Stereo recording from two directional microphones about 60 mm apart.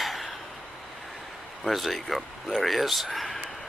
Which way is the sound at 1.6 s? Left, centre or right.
Centre.